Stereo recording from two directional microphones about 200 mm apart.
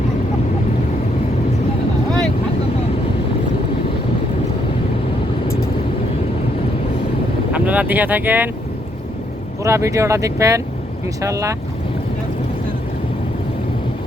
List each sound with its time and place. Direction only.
7.5 s speech: 5° right (ahead or behind)
9.6 s speech: 15° right (ahead or behind)